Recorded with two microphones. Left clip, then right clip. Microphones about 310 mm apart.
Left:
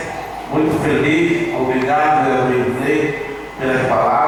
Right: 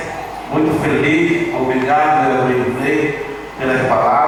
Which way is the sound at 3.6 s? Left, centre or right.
Centre.